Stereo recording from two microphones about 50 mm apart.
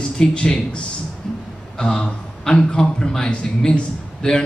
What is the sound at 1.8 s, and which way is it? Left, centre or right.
A man's voice, centre.